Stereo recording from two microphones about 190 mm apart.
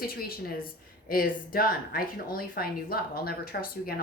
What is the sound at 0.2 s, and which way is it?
Speech, 50° left (ahead or behind).